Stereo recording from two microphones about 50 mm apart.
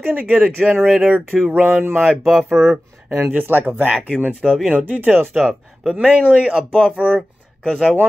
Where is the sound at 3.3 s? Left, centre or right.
Right.